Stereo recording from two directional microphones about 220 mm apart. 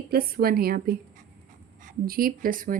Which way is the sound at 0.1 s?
45° right (ahead or behind).